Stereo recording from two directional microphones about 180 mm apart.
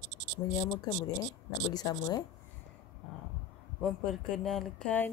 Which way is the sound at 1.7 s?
20° left (ahead or behind).